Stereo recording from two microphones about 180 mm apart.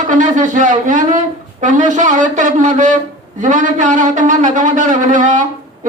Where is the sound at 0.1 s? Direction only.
45° right (ahead or behind).